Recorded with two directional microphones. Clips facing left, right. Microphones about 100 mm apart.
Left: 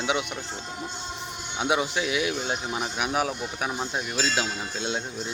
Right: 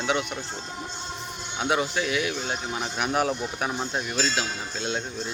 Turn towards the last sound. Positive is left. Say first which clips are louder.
# even
turn(degrees=20)  # may be behind; listen again after turning